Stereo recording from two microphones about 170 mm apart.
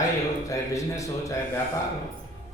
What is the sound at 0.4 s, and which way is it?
Speech, 20° left (ahead or behind).